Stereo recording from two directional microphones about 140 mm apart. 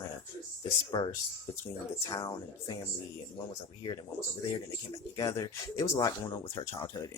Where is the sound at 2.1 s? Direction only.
30° left (ahead or behind).